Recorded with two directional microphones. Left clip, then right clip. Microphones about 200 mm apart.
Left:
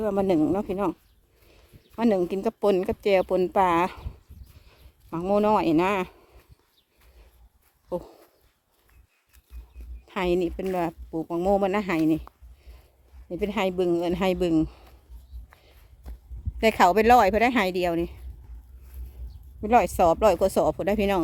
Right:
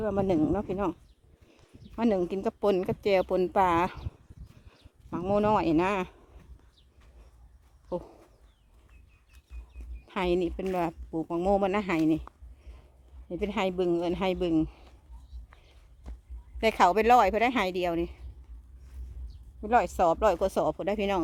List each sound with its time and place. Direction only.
0.0 s a man's voice: 25° left (ahead or behind)
7.9 s dog: 20° left (ahead or behind)
10.1 s a woman's voice: 15° left (ahead or behind)
15.4 s walk: 20° left (ahead or behind)
16.6 s a man's voice: 20° left (ahead or behind)
19.6 s a man's voice: 25° left (ahead or behind)